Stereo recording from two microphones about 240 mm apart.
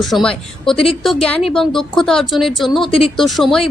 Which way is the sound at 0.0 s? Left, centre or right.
Centre.